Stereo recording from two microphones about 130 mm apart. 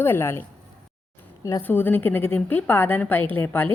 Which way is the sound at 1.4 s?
20° left (ahead or behind).